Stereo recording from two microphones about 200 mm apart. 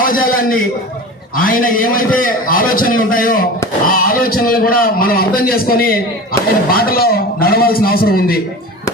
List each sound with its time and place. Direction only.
0.0 s a man's voice: 45° left (ahead or behind)